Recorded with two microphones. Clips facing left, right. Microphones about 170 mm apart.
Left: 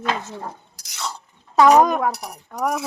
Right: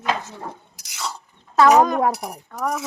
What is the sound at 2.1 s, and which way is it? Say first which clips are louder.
Speech: right 2 dB; centre (ahead or behind).